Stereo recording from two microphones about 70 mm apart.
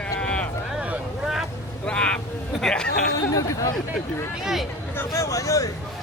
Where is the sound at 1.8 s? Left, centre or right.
Centre.